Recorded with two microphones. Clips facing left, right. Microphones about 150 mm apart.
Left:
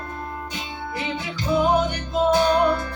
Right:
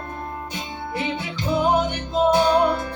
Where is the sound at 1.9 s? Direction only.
25° right (ahead or behind).